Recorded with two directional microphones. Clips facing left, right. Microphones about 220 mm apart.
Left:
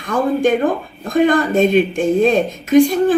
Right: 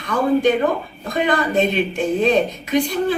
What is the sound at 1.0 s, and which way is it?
A woman's voice, 50° left (ahead or behind).